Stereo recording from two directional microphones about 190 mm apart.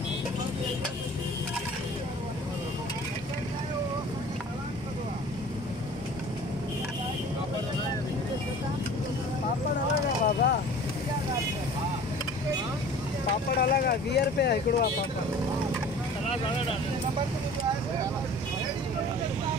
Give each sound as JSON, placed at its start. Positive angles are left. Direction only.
{"t": 10.2, "sound": "vehicle", "side_deg": 55}
{"t": 13.6, "sound": "vehicle", "side_deg": 55}